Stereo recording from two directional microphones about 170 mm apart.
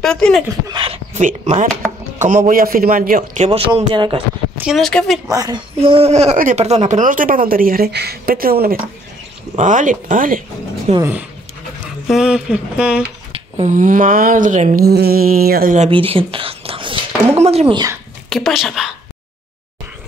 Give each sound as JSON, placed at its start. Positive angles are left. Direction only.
{"t": 0.0, "sound": "speech", "side_deg": 5}
{"t": 0.7, "sound": "a sound", "side_deg": -30}
{"t": 1.4, "sound": "speech", "side_deg": -40}
{"t": 3.4, "sound": "speech", "side_deg": -35}
{"t": 4.6, "sound": "speech", "side_deg": 0}
{"t": 5.3, "sound": "a child's voice", "side_deg": -20}
{"t": 5.8, "sound": "speech", "side_deg": -35}
{"t": 6.3, "sound": "speech", "side_deg": -50}
{"t": 9.6, "sound": "speech", "side_deg": -50}
{"t": 11.0, "sound": "speech", "side_deg": -10}
{"t": 13.6, "sound": "speech", "side_deg": -50}
{"t": 14.9, "sound": "speech", "side_deg": -70}
{"t": 15.9, "sound": "speech", "side_deg": -30}
{"t": 18.3, "sound": "speech", "side_deg": 0}